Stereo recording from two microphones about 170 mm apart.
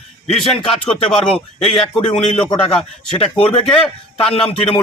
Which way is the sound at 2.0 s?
45° left (ahead or behind).